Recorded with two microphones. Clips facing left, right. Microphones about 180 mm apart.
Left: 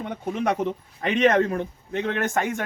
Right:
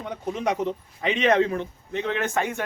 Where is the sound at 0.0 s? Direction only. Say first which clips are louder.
Left 1 dB; 55° left (ahead or behind).